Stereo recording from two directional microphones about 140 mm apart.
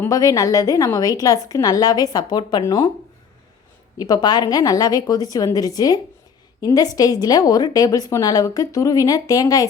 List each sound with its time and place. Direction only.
0.0 s a woman's voice: 25° left (ahead or behind)
3.9 s a woman's voice: 25° left (ahead or behind)